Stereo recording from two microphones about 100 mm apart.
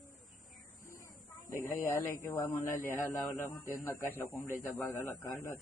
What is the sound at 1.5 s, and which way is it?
Speech, 25° left (ahead or behind).